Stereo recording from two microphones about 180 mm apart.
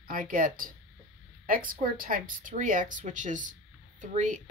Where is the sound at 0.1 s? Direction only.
50° right (ahead or behind).